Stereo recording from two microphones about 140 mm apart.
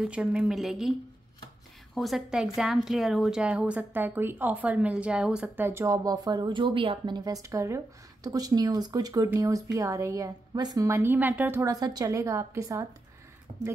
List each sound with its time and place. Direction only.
0.0 s speech: 10° right (ahead or behind)
2.0 s a woman's voice: centre (ahead or behind)
5.7 s speech: 20° right (ahead or behind)
11.7 s speech: 25° right (ahead or behind)
13.5 s speech: 55° right (ahead or behind)